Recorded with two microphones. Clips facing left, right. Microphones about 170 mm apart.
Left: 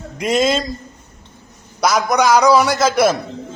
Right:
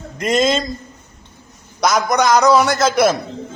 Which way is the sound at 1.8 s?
5° left (ahead or behind).